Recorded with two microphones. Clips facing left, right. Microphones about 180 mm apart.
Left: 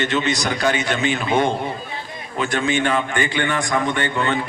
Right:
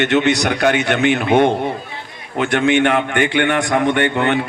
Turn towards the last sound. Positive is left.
turn(degrees=-65)  # may be behind; listen again after turning